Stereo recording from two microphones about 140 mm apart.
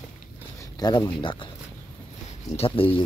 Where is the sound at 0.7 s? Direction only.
30° left (ahead or behind).